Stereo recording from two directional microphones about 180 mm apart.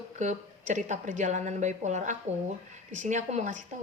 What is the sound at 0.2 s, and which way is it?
A woman's voice, 40° right (ahead or behind).